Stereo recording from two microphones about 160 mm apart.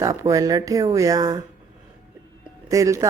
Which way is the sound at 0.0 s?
20° right (ahead or behind).